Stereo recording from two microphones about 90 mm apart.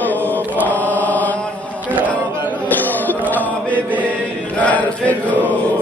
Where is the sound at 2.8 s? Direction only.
20° left (ahead or behind).